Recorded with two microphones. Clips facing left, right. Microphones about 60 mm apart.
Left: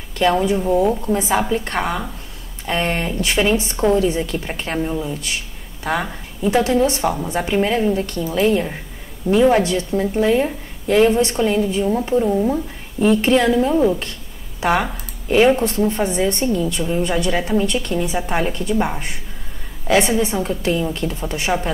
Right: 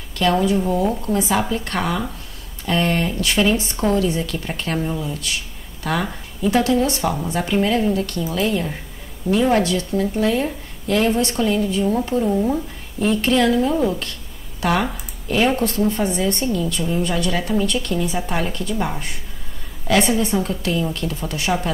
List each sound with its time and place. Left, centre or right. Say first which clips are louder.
0.2 s a woman's voice: left 1 dB; left
0.6 s a woman's voice: left 3 dB; centre
1.5 s a woman's voice: left 2 dB; left
4.7 s a woman's voice: left 3 dB; centre
5.9 s a woman's voice: left 1 dB; left
11.8 s a woman's voice: left 2 dB; centre
13.0 s a woman's voice: left 3 dB; left
14.6 s a woman's voice: left 2 dB; left